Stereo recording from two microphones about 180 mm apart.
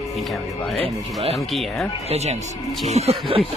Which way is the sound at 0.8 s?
35° right (ahead or behind).